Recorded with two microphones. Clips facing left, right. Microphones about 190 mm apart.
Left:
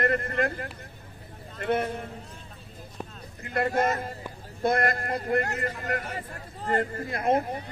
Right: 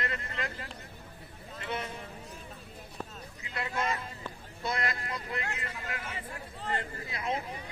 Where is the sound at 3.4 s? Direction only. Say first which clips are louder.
Left 10 dB; 55° left (ahead or behind).